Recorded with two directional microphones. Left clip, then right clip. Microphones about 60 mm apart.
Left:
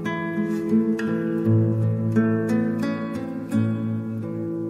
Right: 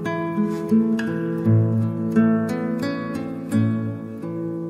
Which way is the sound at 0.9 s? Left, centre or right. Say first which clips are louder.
Even; right.